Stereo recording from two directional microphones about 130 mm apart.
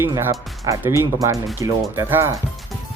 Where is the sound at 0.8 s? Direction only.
20° right (ahead or behind).